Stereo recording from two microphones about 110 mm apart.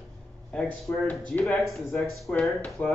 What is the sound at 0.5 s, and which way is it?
Speech, 10° left (ahead or behind).